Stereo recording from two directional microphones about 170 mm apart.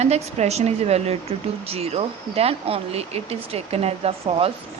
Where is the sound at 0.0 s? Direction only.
40° right (ahead or behind).